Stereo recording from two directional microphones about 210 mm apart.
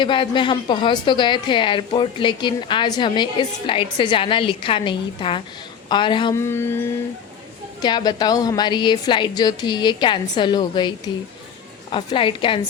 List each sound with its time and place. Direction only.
0.0 s a woman's voice: 20° left (ahead or behind)